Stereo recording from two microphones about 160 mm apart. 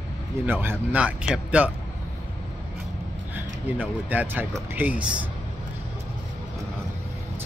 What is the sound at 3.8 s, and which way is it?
Speech, 10° right (ahead or behind).